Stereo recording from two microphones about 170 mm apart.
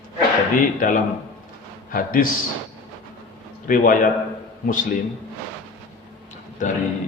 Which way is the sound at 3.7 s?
55° left (ahead or behind).